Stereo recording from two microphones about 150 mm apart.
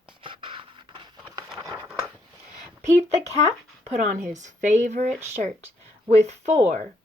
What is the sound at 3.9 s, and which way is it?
Speech, 55° right (ahead or behind).